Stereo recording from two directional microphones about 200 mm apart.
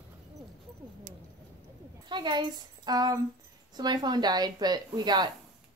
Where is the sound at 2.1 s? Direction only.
20° right (ahead or behind).